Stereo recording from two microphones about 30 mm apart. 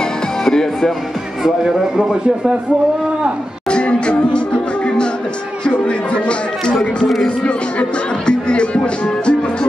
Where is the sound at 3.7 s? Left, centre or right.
Left.